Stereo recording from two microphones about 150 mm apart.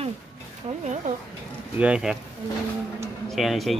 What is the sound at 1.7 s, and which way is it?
Speech, 5° right (ahead or behind).